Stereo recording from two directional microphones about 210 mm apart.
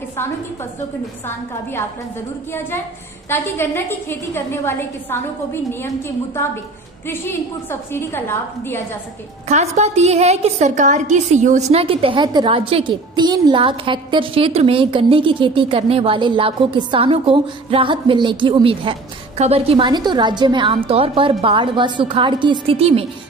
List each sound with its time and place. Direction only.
3.3 s a woman's voice: 10° left (ahead or behind)
7.9 s a woman's voice: 10° left (ahead or behind)
9.5 s a woman's voice: 30° right (ahead or behind)